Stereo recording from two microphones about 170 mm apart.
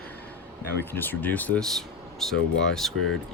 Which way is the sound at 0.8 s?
10° left (ahead or behind).